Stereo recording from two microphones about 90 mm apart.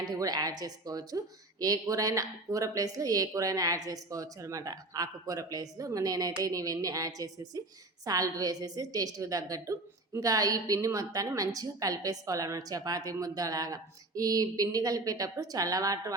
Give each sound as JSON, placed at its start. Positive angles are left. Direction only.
{"t": 0.0, "sound": "a woman's voice", "side_deg": -45}